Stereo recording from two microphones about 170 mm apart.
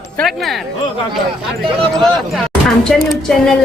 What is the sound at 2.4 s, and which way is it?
Speech, centre (ahead or behind).